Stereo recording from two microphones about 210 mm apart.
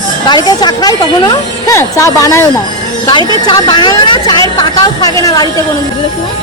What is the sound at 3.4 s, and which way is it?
A woman's voice, 20° left (ahead or behind).